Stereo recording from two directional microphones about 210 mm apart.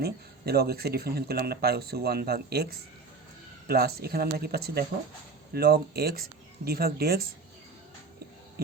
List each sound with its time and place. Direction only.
0.0 s speech: 50° right (ahead or behind)
3.7 s speech: 45° right (ahead or behind)